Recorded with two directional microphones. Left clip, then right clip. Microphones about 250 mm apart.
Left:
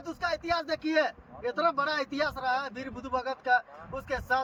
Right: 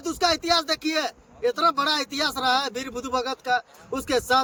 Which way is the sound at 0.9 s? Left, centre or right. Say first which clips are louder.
Even; right.